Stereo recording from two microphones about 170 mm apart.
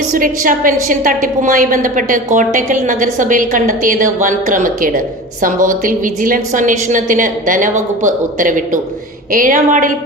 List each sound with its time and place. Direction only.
0.1 s a woman's voice: 55° right (ahead or behind)